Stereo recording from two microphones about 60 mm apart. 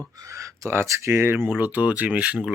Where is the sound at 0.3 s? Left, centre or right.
Right.